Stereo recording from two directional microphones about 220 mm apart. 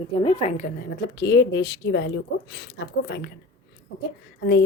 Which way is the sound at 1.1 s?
50° left (ahead or behind).